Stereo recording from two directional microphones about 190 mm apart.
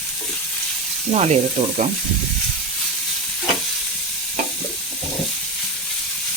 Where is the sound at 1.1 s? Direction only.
35° right (ahead or behind).